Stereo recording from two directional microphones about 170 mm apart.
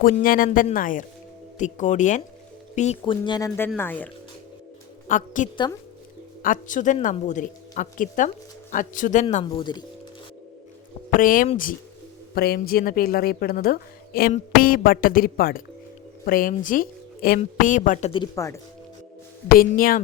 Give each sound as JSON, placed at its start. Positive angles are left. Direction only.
{"t": 0.0, "sound": "a woman's voice", "side_deg": 55}
{"t": 3.0, "sound": "speech", "side_deg": 25}
{"t": 3.8, "sound": "speech", "side_deg": 10}
{"t": 5.0, "sound": "a woman's voice", "side_deg": 50}
{"t": 9.3, "sound": "speech", "side_deg": 30}
{"t": 11.2, "sound": "a woman's voice", "side_deg": 55}
{"t": 12.3, "sound": "a woman's voice", "side_deg": 65}
{"t": 18.1, "sound": "speech", "side_deg": 20}
{"t": 19.5, "sound": "a woman's voice", "side_deg": 60}